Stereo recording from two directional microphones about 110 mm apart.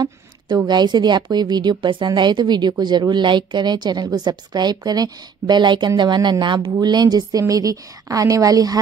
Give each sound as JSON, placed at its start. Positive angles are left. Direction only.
{"t": 0.7, "sound": "a woman's voice", "side_deg": -40}